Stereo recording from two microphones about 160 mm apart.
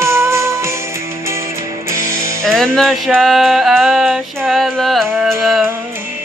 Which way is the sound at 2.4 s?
Centre (ahead or behind).